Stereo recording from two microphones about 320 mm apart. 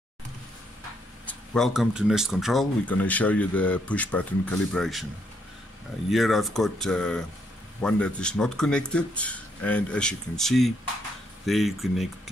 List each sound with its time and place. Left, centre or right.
1.2 s speech: centre
6.0 s speech: centre